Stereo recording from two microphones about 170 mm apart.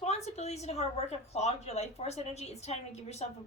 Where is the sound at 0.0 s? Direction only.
40° left (ahead or behind).